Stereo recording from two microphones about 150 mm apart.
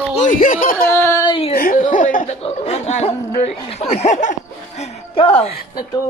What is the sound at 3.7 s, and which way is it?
Chuckle, 45° left (ahead or behind).